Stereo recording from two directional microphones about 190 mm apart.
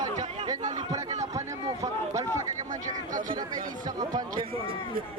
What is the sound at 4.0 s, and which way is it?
Speech, 20° right (ahead or behind).